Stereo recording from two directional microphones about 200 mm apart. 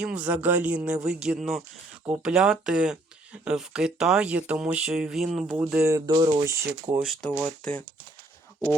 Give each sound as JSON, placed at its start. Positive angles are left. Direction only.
{"t": 0.0, "sound": "speech", "side_deg": -5}
{"t": 6.1, "sound": "speech", "side_deg": -20}
{"t": 7.0, "sound": "speech", "side_deg": 0}